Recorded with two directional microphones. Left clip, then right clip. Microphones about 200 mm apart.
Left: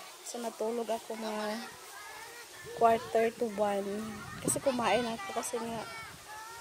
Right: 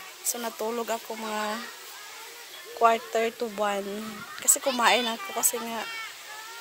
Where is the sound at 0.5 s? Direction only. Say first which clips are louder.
Right 2 dB; 20° right (ahead or behind).